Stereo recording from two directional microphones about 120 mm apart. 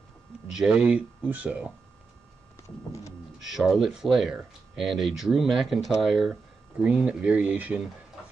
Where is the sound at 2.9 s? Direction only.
25° left (ahead or behind).